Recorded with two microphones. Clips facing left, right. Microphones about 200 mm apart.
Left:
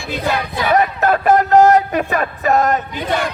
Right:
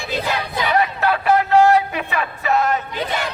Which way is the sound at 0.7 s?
45° left (ahead or behind).